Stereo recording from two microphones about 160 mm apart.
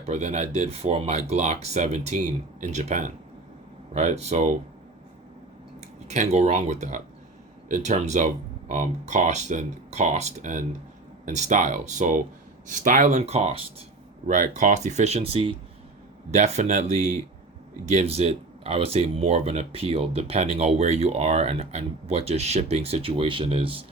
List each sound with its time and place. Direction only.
0.0 s speech: 45° right (ahead or behind)
6.1 s speech: 45° right (ahead or behind)